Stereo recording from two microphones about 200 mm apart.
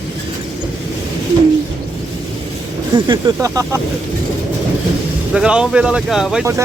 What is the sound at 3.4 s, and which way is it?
Speech, 15° right (ahead or behind).